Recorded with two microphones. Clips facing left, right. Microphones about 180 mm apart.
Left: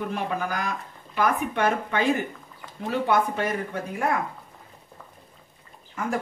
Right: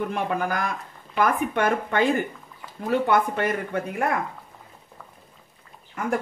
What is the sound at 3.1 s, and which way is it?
Speech, 55° right (ahead or behind).